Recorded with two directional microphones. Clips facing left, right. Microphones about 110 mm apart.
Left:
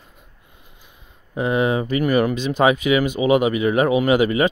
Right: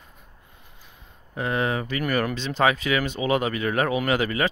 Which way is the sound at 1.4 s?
20° left (ahead or behind).